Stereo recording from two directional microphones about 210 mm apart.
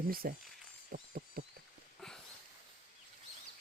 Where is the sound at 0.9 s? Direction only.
45° right (ahead or behind).